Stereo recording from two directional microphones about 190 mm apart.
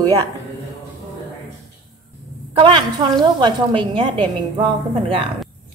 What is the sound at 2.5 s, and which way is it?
A woman's voice, 25° right (ahead or behind).